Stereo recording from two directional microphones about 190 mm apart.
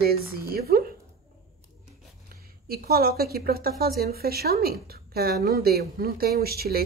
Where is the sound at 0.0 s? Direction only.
55° right (ahead or behind).